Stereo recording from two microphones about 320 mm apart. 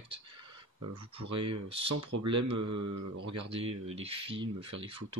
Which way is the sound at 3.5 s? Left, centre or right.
Centre.